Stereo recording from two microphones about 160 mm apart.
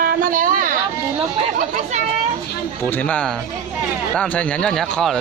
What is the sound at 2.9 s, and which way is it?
Speech, 10° left (ahead or behind).